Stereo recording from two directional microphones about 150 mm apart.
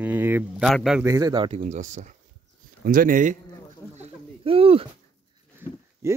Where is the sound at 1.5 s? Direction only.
55° right (ahead or behind).